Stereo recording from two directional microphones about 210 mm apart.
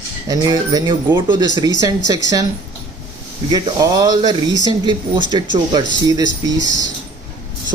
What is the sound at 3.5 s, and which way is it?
Speech, 20° right (ahead or behind).